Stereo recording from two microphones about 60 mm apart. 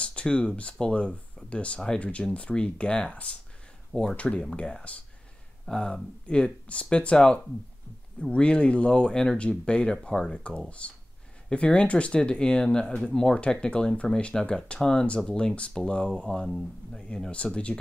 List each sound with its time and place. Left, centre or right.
0.0 s speech: centre